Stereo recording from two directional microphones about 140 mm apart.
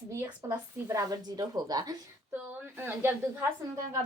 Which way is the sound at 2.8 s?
15° right (ahead or behind).